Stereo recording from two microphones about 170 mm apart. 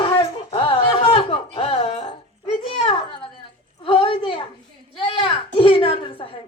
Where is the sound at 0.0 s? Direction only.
30° left (ahead or behind).